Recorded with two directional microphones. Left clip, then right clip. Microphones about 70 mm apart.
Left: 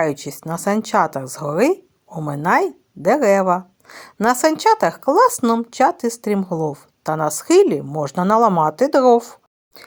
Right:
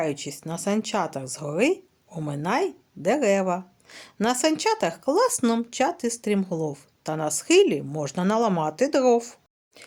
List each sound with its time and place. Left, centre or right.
0.0 s speech: left
2.3 s speech: centre
2.6 s a woman's voice: left
8.3 s speech: left